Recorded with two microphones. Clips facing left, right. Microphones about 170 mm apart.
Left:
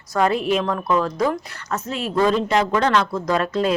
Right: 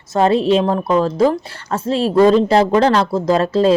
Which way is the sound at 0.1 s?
30° right (ahead or behind).